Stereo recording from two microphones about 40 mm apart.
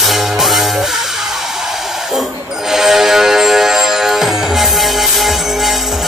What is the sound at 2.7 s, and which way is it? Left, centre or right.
Music, centre.